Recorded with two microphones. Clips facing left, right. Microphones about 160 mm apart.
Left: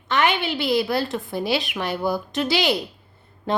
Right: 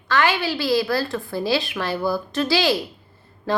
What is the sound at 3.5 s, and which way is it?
Mantra, 20° left (ahead or behind).